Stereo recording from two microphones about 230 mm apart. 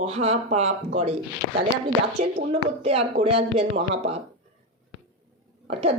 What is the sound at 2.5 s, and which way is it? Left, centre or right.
Speech, right.